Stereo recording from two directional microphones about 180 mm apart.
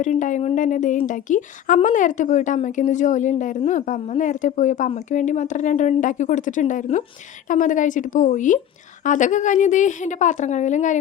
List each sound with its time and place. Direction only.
0.0 s speech: 45° left (ahead or behind)